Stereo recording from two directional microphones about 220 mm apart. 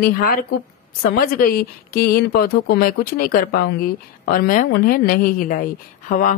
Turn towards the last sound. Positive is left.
turn(degrees=35)  # may be behind; listen again after turning